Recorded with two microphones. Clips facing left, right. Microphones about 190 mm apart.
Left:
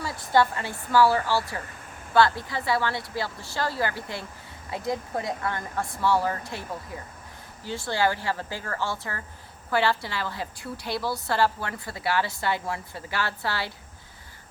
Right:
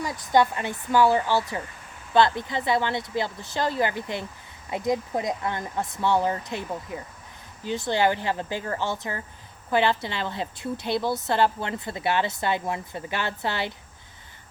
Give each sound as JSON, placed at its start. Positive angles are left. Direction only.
{"t": 0.0, "sound": "a woman's voice", "side_deg": -20}